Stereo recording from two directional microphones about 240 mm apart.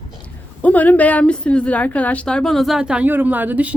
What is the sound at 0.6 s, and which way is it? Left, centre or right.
A woman's voice, centre.